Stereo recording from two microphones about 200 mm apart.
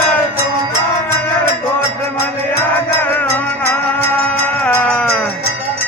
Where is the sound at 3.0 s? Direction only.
10° left (ahead or behind).